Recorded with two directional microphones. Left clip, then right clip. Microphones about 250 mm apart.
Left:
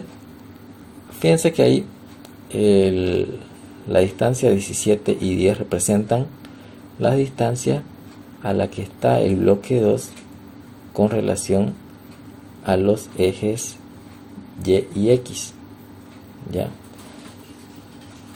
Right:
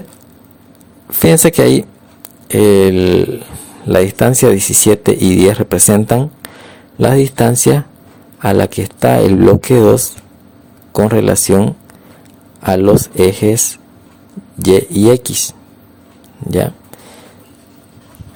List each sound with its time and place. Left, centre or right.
1.2 s speech: right
14.6 s speech: right